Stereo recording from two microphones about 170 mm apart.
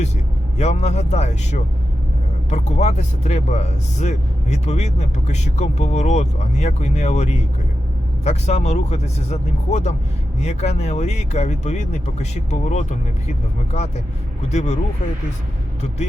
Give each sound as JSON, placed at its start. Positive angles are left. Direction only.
{"t": 0.6, "sound": "speech", "side_deg": 40}